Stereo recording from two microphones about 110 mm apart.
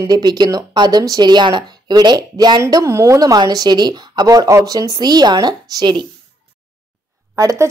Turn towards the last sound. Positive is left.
turn(degrees=-30)  # may be behind; listen again after turning